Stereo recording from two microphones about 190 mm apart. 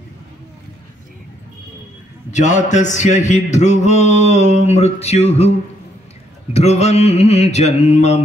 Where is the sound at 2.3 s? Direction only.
40° left (ahead or behind).